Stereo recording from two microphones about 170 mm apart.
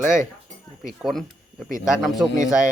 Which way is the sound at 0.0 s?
5° right (ahead or behind).